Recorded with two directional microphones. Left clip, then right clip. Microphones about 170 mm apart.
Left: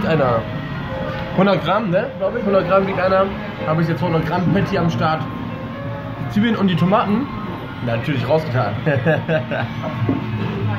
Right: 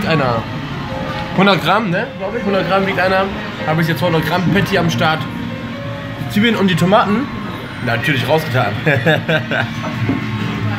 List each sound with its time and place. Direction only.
0.1 s speech: 10° left (ahead or behind)
1.4 s speech: centre (ahead or behind)
6.4 s speech: 10° right (ahead or behind)
8.1 s speech: centre (ahead or behind)